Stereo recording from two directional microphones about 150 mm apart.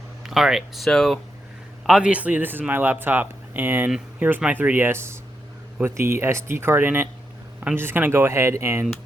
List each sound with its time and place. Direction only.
0.2 s speech: centre (ahead or behind)